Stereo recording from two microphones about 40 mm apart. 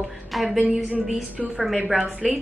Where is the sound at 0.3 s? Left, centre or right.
Centre.